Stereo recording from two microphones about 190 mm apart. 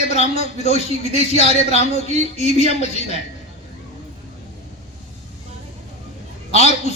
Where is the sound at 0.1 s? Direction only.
35° left (ahead or behind).